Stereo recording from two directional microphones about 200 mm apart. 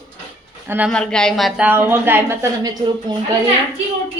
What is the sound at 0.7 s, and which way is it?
Speech, 10° right (ahead or behind).